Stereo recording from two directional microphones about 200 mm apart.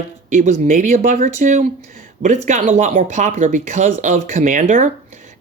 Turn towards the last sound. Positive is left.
turn(degrees=-40)  # may be behind; listen again after turning